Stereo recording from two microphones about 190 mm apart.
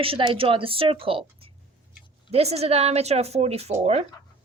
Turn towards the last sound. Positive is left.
turn(degrees=-35)  # may be behind; listen again after turning